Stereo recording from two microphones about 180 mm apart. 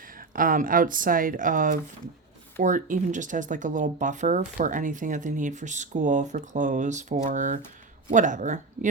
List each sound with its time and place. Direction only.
0.3 s speech: 50° right (ahead or behind)